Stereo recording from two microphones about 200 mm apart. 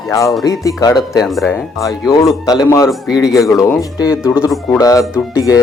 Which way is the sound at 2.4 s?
15° left (ahead or behind).